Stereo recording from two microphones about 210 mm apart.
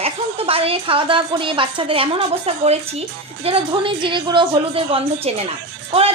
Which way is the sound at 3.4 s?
25° right (ahead or behind).